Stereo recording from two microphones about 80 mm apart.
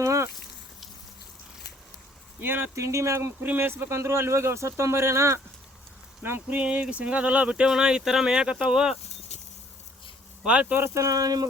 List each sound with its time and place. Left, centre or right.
0.0 s a sound: right
2.4 s speech: right
2.7 s speech: right
3.4 s speech: right
6.6 s speech: centre
10.4 s speech: centre
10.8 s speech: right
11.0 s speech: right